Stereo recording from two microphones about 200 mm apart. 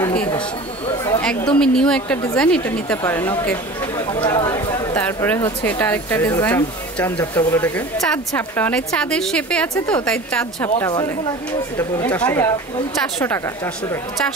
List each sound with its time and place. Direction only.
0.0 s a sound: 5° left (ahead or behind)
1.6 s a woman's voice: 5° left (ahead or behind)
4.1 s a woman's voice: 25° left (ahead or behind)